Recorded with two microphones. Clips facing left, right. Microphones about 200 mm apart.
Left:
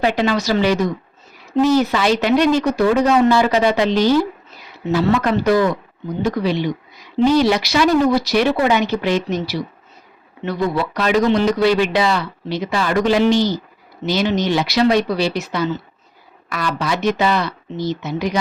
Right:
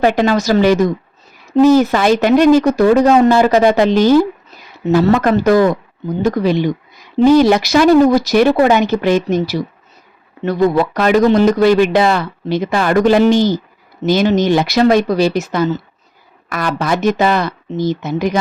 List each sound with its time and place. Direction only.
0.0 s a woman's voice: 45° right (ahead or behind)